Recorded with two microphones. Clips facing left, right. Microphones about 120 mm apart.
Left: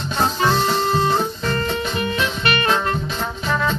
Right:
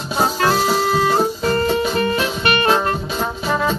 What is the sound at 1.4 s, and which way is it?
Music, 35° right (ahead or behind).